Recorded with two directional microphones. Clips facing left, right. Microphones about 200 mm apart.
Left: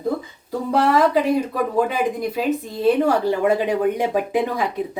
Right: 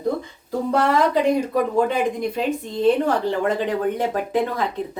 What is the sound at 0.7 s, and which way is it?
Speech, 5° left (ahead or behind).